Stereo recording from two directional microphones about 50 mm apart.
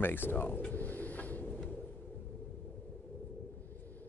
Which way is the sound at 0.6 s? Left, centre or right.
Left.